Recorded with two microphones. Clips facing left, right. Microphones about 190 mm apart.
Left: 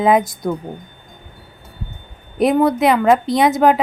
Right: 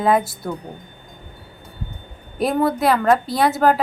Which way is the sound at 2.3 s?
20° left (ahead or behind).